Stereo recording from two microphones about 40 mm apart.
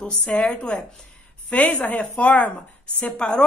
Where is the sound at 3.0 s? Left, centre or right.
Left.